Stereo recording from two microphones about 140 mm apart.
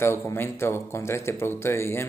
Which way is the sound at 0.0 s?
20° left (ahead or behind).